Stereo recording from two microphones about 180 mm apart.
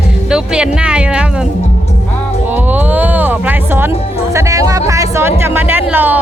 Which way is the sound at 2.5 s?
10° right (ahead or behind).